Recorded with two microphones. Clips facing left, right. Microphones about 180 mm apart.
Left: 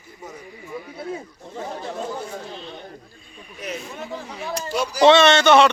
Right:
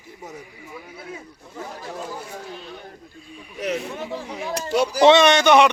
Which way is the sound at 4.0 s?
15° right (ahead or behind).